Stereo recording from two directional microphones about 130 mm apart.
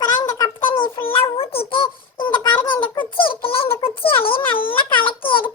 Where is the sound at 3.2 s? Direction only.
45° left (ahead or behind).